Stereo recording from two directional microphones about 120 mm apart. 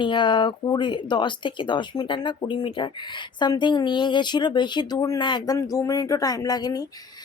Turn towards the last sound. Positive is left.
turn(degrees=35)  # may be behind; listen again after turning